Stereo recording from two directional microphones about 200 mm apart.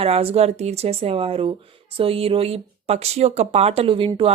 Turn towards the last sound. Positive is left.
turn(degrees=-25)  # may be behind; listen again after turning